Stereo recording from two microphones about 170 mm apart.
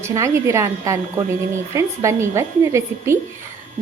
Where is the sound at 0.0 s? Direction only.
15° right (ahead or behind).